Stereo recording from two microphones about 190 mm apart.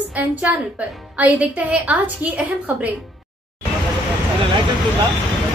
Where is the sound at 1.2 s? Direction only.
5° right (ahead or behind).